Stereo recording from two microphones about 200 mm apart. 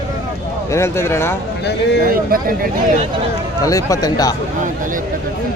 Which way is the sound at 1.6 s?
55° left (ahead or behind).